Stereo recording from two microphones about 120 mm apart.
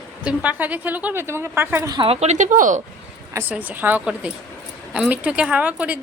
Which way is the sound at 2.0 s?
70° right (ahead or behind).